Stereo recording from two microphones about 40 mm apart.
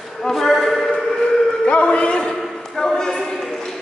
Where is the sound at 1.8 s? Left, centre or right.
Left.